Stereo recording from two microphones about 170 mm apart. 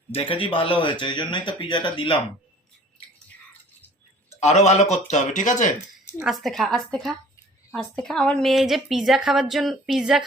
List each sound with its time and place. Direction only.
0.1 s speech: 30° left (ahead or behind)
4.4 s speech: 40° left (ahead or behind)
6.1 s a woman's voice: centre (ahead or behind)